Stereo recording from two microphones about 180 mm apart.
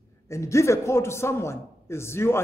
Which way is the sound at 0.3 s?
15° left (ahead or behind).